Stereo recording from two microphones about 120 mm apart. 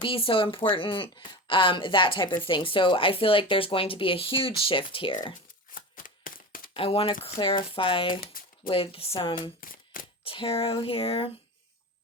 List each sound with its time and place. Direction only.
0.0 s speech: 50° left (ahead or behind)
6.7 s speech: 50° left (ahead or behind)